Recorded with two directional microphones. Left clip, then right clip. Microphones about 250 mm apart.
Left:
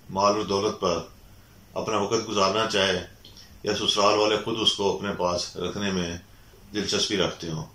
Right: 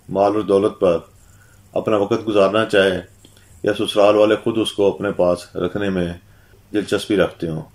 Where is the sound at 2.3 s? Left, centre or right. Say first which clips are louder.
Right 10 dB; right.